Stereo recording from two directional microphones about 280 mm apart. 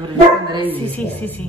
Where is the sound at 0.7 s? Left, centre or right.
Centre.